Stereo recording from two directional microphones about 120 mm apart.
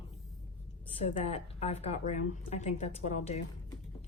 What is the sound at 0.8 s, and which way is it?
Speech, 60° left (ahead or behind).